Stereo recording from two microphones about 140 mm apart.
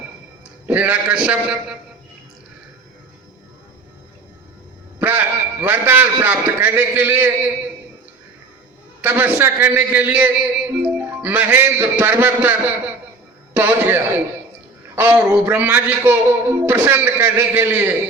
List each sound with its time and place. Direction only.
0.7 s a man's voice: 10° right (ahead or behind)
4.9 s a man's voice: 15° right (ahead or behind)
9.0 s a man's voice: 15° right (ahead or behind)